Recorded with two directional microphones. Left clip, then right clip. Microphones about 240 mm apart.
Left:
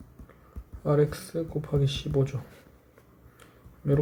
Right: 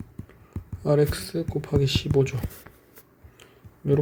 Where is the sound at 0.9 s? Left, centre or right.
Right.